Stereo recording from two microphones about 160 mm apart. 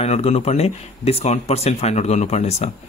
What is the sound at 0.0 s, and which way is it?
Speech, 40° left (ahead or behind).